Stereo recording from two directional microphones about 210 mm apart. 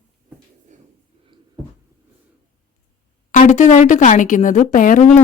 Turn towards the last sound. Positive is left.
turn(degrees=35)  # may be behind; listen again after turning